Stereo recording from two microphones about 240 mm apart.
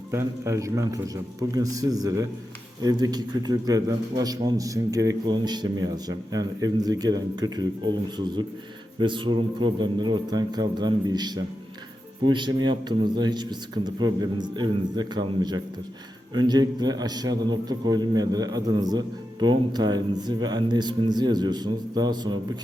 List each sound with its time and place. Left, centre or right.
0.1 s a man's voice: centre